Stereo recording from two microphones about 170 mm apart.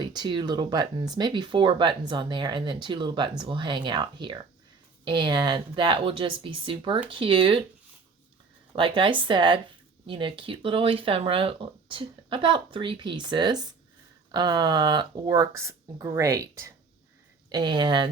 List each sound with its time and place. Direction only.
0.0 s speech: 25° right (ahead or behind)
8.7 s speech: 30° right (ahead or behind)